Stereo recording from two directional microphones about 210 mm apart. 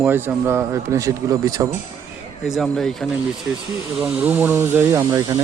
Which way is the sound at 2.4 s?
Centre (ahead or behind).